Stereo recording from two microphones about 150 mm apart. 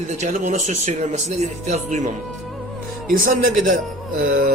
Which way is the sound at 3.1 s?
65° right (ahead or behind).